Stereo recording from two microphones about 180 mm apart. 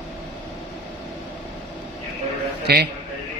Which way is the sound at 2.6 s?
60° right (ahead or behind).